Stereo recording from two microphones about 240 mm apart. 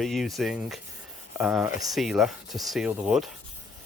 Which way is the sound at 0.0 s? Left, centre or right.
Centre.